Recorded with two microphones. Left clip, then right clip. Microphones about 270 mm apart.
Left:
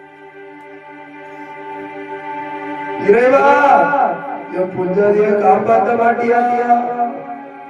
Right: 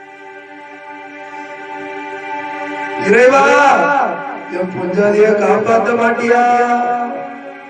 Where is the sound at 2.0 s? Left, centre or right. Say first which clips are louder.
Right 2 dB; centre.